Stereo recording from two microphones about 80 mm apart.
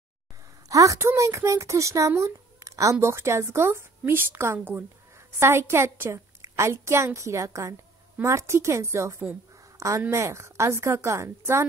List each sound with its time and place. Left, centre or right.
0.7 s a woman's voice: right